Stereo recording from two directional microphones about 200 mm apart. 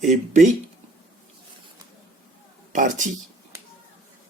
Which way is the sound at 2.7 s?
40° right (ahead or behind).